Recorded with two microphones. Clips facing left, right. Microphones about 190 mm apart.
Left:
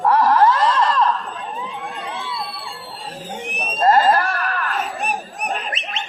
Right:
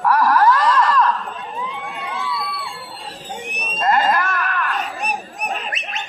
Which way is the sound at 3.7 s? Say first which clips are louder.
Left 3 dB; 35° left (ahead or behind).